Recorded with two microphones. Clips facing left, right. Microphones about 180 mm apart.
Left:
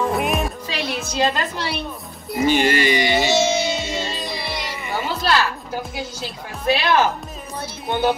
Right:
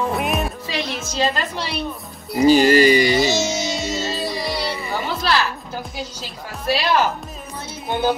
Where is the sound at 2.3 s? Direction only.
35° right (ahead or behind).